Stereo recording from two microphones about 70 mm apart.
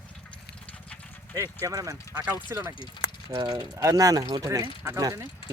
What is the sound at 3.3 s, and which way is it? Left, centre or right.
Speech, right.